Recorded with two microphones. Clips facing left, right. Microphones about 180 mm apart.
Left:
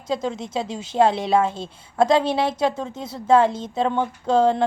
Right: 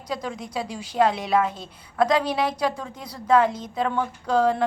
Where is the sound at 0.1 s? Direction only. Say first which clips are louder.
Left 5 dB; 25° left (ahead or behind).